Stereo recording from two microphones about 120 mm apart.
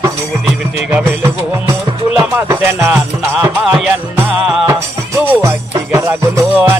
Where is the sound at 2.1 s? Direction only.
25° right (ahead or behind).